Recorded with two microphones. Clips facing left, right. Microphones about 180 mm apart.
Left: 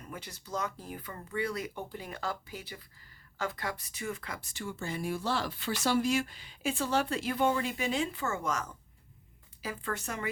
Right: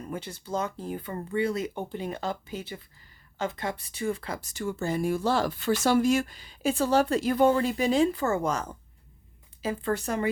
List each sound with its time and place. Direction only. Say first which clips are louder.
0.0 s speech: right 8 dB; 30° right (ahead or behind)